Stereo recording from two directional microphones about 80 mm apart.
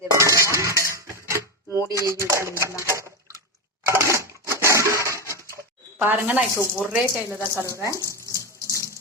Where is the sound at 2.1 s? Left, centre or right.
Right.